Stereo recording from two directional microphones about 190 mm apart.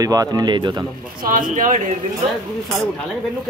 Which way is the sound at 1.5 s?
40° right (ahead or behind).